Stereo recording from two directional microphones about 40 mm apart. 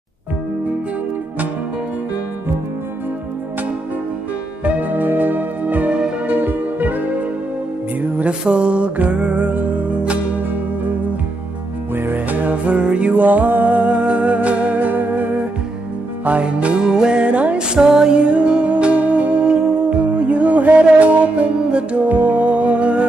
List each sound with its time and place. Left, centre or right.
4.6 s music: right
8.3 s music: right
9.8 s music: right
11.9 s music: right
12.8 s music: right
13.1 s music: right
16.3 s music: right
17.6 s music: centre
22.1 s music: right